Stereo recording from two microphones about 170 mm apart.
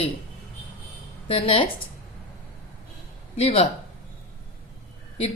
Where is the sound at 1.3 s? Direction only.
30° left (ahead or behind).